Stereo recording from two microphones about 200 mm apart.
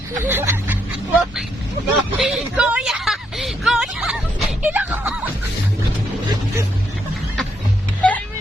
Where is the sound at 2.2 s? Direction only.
5° right (ahead or behind).